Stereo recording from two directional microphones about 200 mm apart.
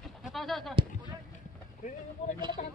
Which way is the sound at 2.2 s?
35° left (ahead or behind).